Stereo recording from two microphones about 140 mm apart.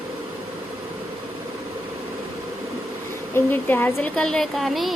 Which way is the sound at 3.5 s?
15° left (ahead or behind).